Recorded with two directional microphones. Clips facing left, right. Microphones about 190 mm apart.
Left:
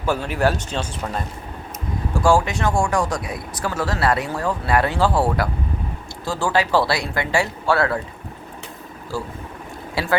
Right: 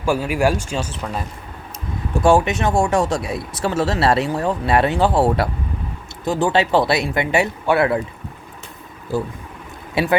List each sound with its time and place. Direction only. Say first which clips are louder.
0.0 s speech: right 2 dB; 10° right (ahead or behind)
2.2 s speech: right 3 dB; 20° right (ahead or behind)
9.1 s speech: right 5 dB; 20° right (ahead or behind)